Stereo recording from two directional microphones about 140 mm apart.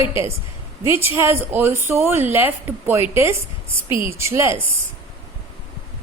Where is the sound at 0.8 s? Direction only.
15° right (ahead or behind).